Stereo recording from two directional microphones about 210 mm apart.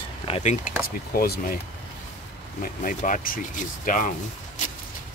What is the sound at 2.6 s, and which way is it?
Speech, 40° left (ahead or behind).